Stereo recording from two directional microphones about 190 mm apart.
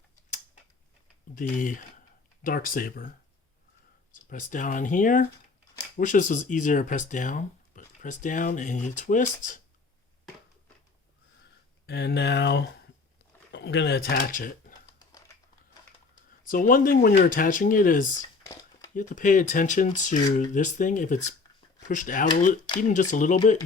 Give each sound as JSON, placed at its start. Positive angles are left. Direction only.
{"t": 1.4, "sound": "speech", "side_deg": 45}
{"t": 4.1, "sound": "speech", "side_deg": 40}
{"t": 11.9, "sound": "speech", "side_deg": 60}
{"t": 16.5, "sound": "speech", "side_deg": 45}